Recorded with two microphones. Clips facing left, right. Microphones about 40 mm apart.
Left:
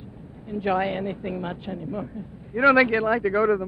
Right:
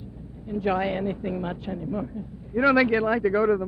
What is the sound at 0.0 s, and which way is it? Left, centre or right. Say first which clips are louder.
A woman's voice: right 1 dB; left.